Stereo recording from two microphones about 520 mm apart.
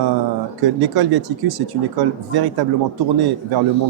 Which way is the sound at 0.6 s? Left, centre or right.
Right.